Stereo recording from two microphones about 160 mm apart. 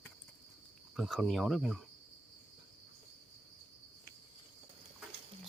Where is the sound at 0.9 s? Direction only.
Centre (ahead or behind).